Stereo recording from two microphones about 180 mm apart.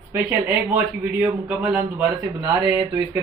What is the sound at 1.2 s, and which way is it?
Speech, 5° right (ahead or behind).